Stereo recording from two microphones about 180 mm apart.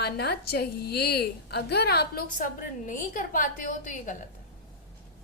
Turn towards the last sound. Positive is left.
turn(degrees=45)  # may be behind; listen again after turning